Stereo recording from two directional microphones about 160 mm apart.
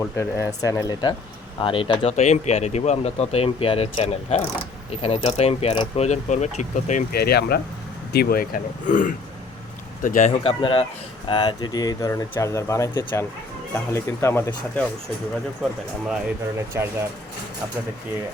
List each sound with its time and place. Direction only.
0.0 s speech: 15° left (ahead or behind)
1.5 s speech: 35° left (ahead or behind)
6.1 s speech: 45° left (ahead or behind)
7.1 s speech: 80° left; by 10.3 s 55° left (ahead or behind)
10.4 s speech: 35° left (ahead or behind); by 14.8 s 15° left (ahead or behind)
16.6 s speech: 15° right (ahead or behind)